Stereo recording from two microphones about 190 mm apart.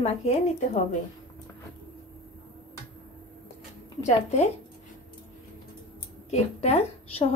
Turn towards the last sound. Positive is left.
turn(degrees=35)  # may be behind; listen again after turning